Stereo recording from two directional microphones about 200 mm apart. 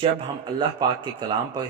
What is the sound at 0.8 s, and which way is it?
Speech, 20° right (ahead or behind).